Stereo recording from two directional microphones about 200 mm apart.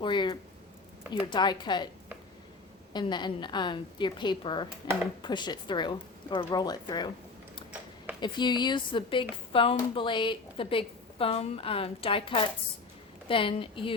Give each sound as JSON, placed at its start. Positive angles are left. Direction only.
{"t": 0.0, "sound": "a woman's voice", "side_deg": 25}
{"t": 2.9, "sound": "a woman's voice", "side_deg": 20}
{"t": 8.2, "sound": "a woman's voice", "side_deg": 20}